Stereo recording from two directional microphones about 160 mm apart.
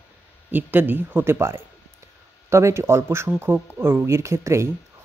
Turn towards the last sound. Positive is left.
turn(degrees=-20)  # may be behind; listen again after turning